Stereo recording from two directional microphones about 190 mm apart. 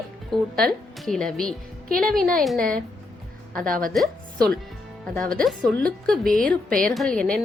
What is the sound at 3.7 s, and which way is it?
Speech, 45° right (ahead or behind).